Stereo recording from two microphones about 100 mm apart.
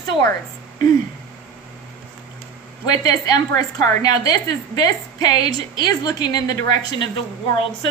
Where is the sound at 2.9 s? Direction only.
40° left (ahead or behind).